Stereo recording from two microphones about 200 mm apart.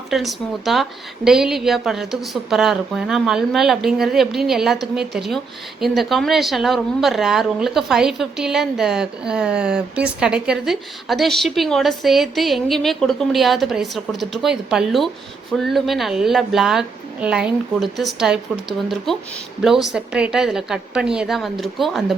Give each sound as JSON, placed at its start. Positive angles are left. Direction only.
{"t": 0.1, "sound": "a woman's voice", "side_deg": 0}
{"t": 19.6, "sound": "a woman's voice", "side_deg": 0}